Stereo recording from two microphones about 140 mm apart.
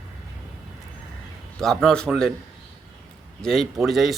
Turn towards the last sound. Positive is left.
turn(degrees=0)  # may be behind; listen again after turning